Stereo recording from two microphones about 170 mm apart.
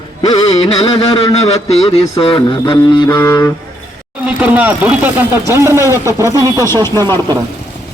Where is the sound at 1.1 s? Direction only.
40° left (ahead or behind); by 3.5 s 20° left (ahead or behind).